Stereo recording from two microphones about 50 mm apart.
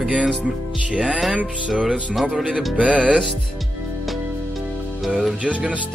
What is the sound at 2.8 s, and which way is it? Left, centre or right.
Music, right.